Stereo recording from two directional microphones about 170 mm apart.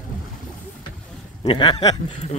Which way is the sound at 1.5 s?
25° left (ahead or behind).